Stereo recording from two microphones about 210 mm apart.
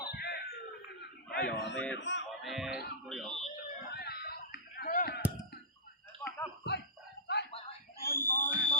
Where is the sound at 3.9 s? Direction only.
50° left (ahead or behind).